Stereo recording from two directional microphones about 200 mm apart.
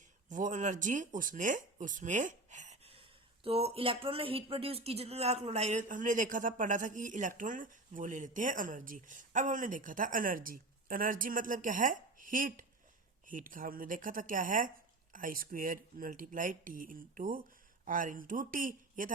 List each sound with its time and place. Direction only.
0.3 s speech: 40° right (ahead or behind)